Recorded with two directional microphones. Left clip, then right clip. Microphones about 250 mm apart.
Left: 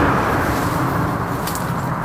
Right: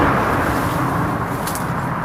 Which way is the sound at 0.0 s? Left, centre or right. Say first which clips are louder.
Right 1 dB; right.